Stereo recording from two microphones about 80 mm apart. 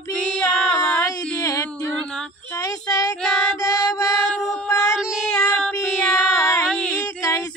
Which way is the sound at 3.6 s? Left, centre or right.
Left.